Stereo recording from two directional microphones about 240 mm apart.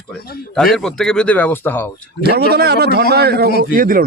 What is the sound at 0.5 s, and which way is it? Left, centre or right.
A man's voice, centre.